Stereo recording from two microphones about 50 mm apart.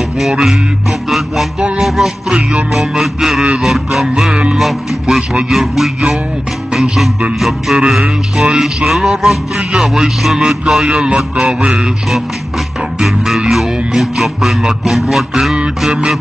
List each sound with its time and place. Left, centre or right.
0.2 s speech: centre
1.1 s music: centre
1.8 s a man's voice: centre
6.7 s music: centre
7.3 s a man's voice: centre
11.4 s music: centre
13.5 s a man's voice: centre